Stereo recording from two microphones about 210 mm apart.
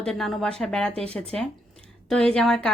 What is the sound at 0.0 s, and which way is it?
Speech, centre (ahead or behind).